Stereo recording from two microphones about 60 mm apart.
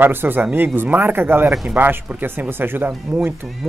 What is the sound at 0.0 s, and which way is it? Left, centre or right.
Speech, right.